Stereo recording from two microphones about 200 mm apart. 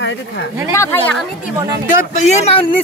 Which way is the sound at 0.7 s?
15° left (ahead or behind).